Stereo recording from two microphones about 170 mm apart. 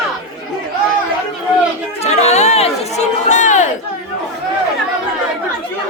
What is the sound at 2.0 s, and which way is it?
Chatter, 40° left (ahead or behind).